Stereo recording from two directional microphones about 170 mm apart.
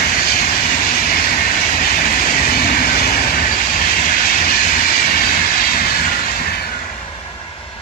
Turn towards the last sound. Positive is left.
turn(degrees=65)  # may be behind; listen again after turning